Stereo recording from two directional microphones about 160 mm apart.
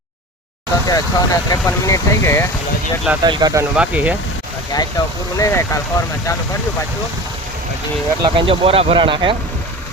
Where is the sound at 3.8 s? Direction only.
10° right (ahead or behind).